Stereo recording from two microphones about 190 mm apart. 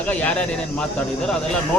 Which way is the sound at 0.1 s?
5° left (ahead or behind).